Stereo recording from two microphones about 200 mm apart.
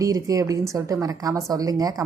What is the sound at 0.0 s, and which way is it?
A woman's voice, 15° right (ahead or behind).